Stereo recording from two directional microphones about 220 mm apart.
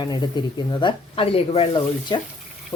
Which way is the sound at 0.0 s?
20° left (ahead or behind).